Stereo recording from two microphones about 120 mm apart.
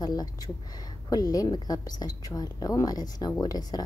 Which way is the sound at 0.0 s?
35° left (ahead or behind).